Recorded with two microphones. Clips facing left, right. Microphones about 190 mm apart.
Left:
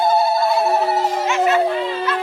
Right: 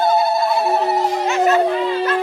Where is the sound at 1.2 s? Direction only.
40° right (ahead or behind).